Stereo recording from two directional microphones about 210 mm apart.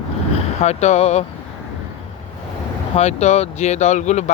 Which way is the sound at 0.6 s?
30° left (ahead or behind).